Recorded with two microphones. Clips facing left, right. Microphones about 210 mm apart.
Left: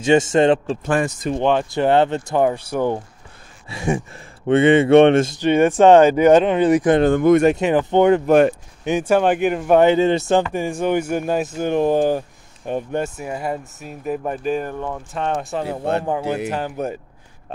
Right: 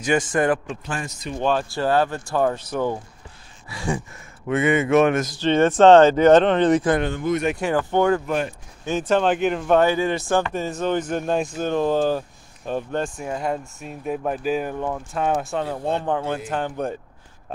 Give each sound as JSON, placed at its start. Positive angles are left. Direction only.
{"t": 0.0, "sound": "speech", "side_deg": 25}
{"t": 0.8, "sound": "a man's voice", "side_deg": 60}
{"t": 1.4, "sound": "speech", "side_deg": 20}
{"t": 3.6, "sound": "speech", "side_deg": 25}
{"t": 5.4, "sound": "speech", "side_deg": 15}
{"t": 7.1, "sound": "a man's voice", "side_deg": 55}
{"t": 7.5, "sound": "speech", "side_deg": 20}
{"t": 8.3, "sound": "a man's voice", "side_deg": 60}
{"t": 8.8, "sound": "speech", "side_deg": 10}
{"t": 9.8, "sound": "speech", "side_deg": 25}
{"t": 10.5, "sound": "speech", "side_deg": 15}
{"t": 13.2, "sound": "speech", "side_deg": 5}
{"t": 15.8, "sound": "speech", "side_deg": 70}
{"t": 16.1, "sound": "speech", "side_deg": 5}